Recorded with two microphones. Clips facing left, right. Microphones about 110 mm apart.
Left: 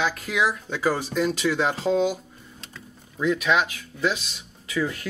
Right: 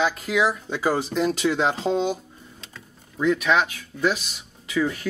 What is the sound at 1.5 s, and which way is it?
Speech, 15° right (ahead or behind).